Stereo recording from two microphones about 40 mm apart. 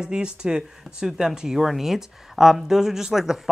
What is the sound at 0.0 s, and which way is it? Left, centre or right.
Speech, right.